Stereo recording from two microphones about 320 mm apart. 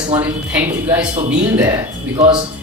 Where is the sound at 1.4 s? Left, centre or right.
Centre.